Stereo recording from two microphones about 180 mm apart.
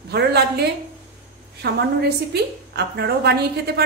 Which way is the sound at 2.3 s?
65° right (ahead or behind).